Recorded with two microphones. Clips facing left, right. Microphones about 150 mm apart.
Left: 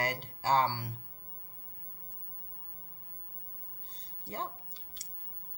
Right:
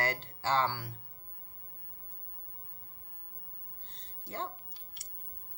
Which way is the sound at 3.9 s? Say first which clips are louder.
Even; 10° left (ahead or behind).